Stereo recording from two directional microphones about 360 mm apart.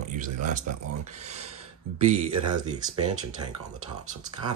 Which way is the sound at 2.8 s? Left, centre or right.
Centre.